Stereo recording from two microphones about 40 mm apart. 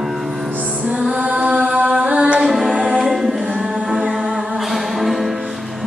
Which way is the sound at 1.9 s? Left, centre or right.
Right.